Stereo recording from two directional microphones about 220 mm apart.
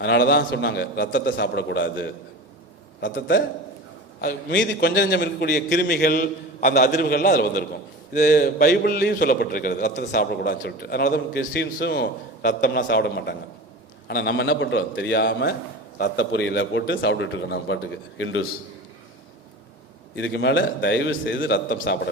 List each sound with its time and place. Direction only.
0.0 s a man's voice: 50° left (ahead or behind); by 10.0 s 35° left (ahead or behind)
10.0 s a man's voice: 45° left (ahead or behind)
20.1 s a man's voice: 55° left (ahead or behind)